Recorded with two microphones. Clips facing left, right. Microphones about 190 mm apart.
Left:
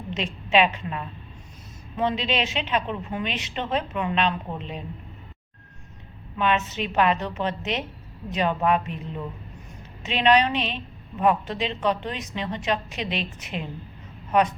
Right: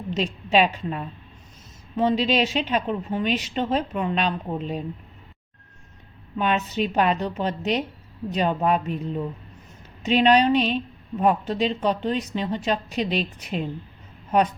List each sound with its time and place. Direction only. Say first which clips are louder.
0.2 s a woman's voice: right 1 dB; 40° right (ahead or behind)
6.4 s a woman's voice: right 1 dB; 40° right (ahead or behind)